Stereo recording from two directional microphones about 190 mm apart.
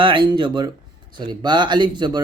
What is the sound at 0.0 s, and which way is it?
Speech, 25° right (ahead or behind).